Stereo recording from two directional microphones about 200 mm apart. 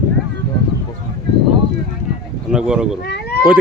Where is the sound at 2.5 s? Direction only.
5° right (ahead or behind).